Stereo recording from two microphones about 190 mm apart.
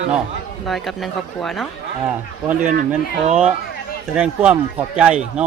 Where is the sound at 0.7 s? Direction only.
Centre (ahead or behind).